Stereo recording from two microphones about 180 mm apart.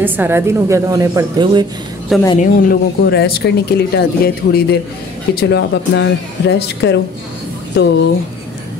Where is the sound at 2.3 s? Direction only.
50° left (ahead or behind).